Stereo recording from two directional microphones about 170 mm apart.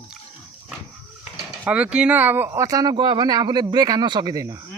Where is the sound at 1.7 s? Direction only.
5° right (ahead or behind).